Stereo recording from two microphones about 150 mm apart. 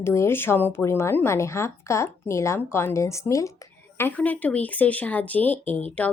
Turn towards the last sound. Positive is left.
turn(degrees=10)  # may be behind; listen again after turning